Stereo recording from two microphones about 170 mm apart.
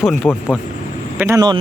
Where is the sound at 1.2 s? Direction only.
20° right (ahead or behind).